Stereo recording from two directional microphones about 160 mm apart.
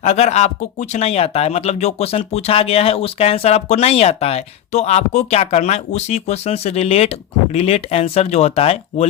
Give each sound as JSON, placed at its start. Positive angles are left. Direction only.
{"t": 0.0, "sound": "speech", "side_deg": 45}